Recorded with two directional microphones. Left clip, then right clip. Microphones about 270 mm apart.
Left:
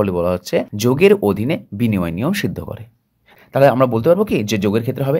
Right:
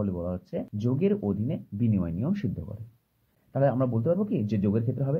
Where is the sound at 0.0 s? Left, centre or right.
Left.